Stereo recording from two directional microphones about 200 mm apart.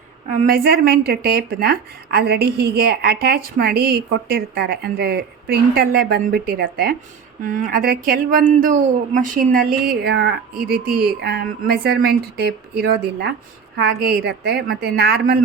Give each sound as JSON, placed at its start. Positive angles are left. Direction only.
{"t": 0.3, "sound": "speech", "side_deg": -45}